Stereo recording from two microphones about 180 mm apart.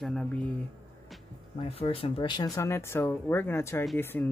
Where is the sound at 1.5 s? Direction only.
30° left (ahead or behind).